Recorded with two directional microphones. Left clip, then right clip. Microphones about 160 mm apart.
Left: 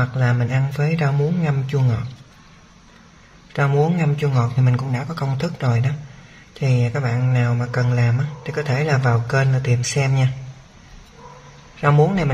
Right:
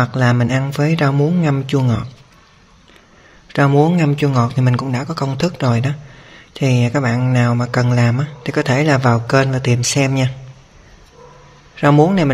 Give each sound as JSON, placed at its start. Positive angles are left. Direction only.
{"t": 0.0, "sound": "speech", "side_deg": -65}
{"t": 3.5, "sound": "speech", "side_deg": -50}
{"t": 6.5, "sound": "speech", "side_deg": -60}
{"t": 11.8, "sound": "speech", "side_deg": -50}